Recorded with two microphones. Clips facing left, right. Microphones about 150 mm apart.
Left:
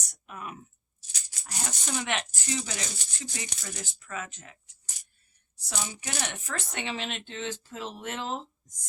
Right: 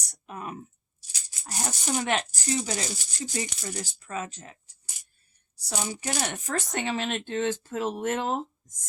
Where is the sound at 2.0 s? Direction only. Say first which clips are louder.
Right 4 dB; 40° right (ahead or behind).